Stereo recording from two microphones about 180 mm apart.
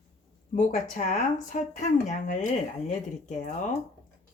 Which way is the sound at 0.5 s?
45° left (ahead or behind).